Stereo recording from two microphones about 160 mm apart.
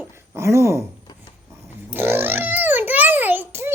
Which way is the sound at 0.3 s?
20° right (ahead or behind).